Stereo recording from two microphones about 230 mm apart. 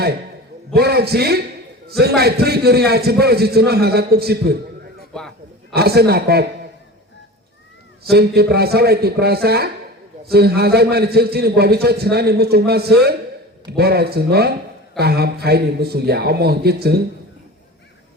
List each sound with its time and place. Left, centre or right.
0.7 s a man's voice: right
5.7 s a man's voice: right
8.1 s a man's voice: right